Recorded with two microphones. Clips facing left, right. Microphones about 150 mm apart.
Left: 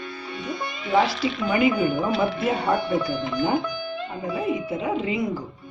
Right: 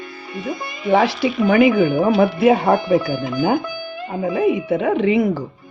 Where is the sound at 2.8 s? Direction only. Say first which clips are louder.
Right 6 dB; 5° right (ahead or behind).